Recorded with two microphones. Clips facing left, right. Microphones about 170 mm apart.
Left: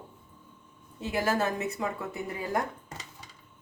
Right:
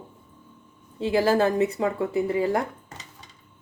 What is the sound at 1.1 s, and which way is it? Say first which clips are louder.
Speech: right 7 dB; 30° right (ahead or behind).